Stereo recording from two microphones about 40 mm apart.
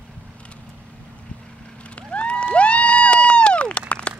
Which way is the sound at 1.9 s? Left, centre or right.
Left.